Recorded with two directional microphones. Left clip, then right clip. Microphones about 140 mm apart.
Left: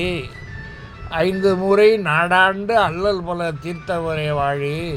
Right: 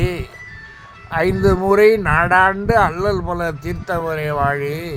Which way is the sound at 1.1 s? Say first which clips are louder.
Right 1 dB; 15° right (ahead or behind).